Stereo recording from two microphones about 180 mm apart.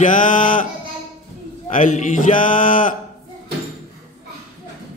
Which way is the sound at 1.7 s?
45° left (ahead or behind).